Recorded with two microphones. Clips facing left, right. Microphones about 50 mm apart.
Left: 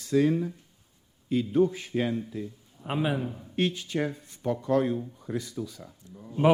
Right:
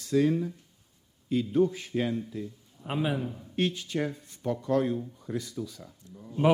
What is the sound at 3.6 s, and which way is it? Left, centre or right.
A man's voice, centre.